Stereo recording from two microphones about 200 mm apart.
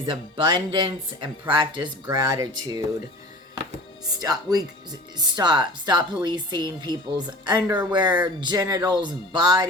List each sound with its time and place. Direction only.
0.0 s speech: 25° right (ahead or behind)
4.2 s speech: 20° right (ahead or behind)